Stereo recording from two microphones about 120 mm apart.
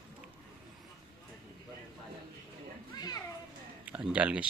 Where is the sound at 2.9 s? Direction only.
35° left (ahead or behind).